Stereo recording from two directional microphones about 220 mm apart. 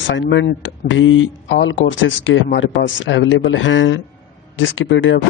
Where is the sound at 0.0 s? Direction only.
55° left (ahead or behind).